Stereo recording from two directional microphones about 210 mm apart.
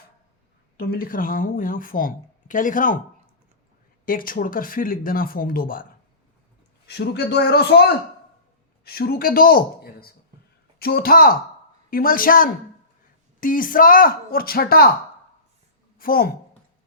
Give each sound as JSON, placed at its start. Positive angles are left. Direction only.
{"t": 0.8, "sound": "speech", "side_deg": 45}
{"t": 4.0, "sound": "speech", "side_deg": 40}
{"t": 6.8, "sound": "speech", "side_deg": 50}
{"t": 16.0, "sound": "a woman's voice", "side_deg": 45}